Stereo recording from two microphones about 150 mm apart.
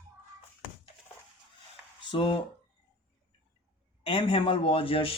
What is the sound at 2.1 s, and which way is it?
Speech, 35° left (ahead or behind).